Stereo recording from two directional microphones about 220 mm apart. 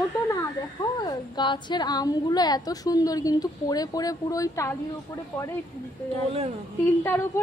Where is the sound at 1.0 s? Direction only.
20° left (ahead or behind).